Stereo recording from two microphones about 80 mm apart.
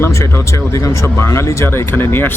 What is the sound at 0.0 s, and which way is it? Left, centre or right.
Speech, left.